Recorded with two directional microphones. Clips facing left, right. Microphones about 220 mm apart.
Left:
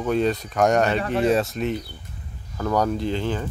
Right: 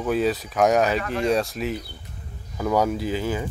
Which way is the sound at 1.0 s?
35° left (ahead or behind).